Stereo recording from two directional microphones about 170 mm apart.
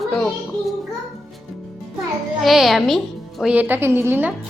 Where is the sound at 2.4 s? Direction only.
Centre (ahead or behind).